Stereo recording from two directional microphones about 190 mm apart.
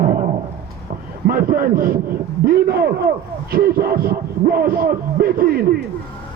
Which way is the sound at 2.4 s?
55° right (ahead or behind).